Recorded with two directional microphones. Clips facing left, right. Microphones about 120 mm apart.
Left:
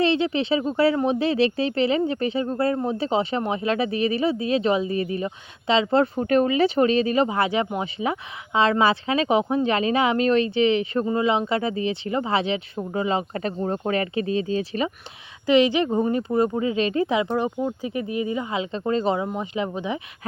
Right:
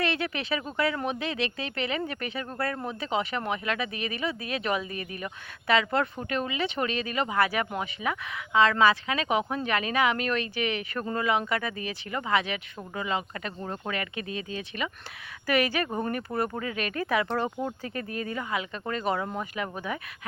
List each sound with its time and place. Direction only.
0.0 s speech: 25° left (ahead or behind)
15.4 s speech: 20° left (ahead or behind)